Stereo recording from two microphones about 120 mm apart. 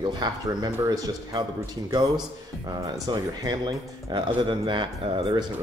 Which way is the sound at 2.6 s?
35° right (ahead or behind).